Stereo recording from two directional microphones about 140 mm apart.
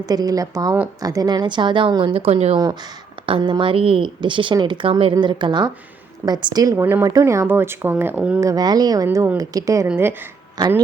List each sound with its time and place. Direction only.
0.0 s a woman's voice: 25° right (ahead or behind)
2.1 s a woman's voice: 45° right (ahead or behind); by 8.4 s 10° right (ahead or behind)
8.4 s a woman's voice: 25° right (ahead or behind)
9.0 s a woman's voice: 15° right (ahead or behind)
10.6 s a woman's voice: 30° right (ahead or behind)